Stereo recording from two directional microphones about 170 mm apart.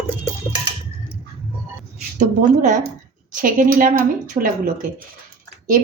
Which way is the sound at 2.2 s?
45° right (ahead or behind).